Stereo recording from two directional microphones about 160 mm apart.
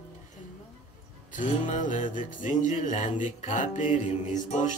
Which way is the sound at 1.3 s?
55° left (ahead or behind).